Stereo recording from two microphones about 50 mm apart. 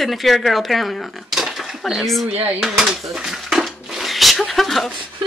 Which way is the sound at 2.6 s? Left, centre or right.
Centre.